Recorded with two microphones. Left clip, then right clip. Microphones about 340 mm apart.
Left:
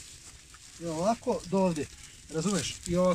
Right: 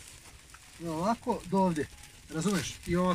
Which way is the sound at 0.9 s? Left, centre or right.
Centre.